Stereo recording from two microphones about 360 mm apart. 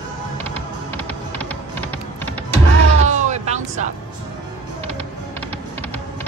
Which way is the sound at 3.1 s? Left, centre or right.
Centre.